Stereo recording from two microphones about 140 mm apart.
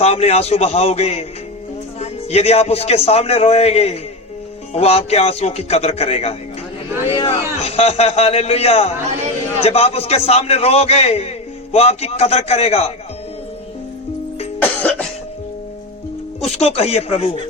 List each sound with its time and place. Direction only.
0.0 s a man's voice: 50° left (ahead or behind)
14.6 s music: 10° left (ahead or behind)
16.6 s a man's voice: 45° left (ahead or behind)